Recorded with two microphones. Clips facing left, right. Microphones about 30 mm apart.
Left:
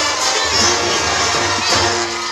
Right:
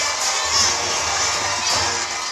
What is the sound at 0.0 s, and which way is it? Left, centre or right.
Crowd, left.